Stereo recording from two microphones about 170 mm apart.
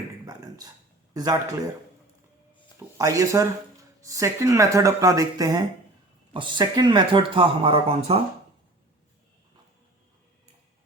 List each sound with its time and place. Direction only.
0.3 s a sound: 20° right (ahead or behind)
1.1 s speech: 20° right (ahead or behind)
2.7 s speech: 15° right (ahead or behind); by 8.2 s 35° right (ahead or behind)